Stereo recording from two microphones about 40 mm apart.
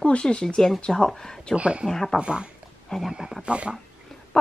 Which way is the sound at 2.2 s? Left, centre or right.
Right.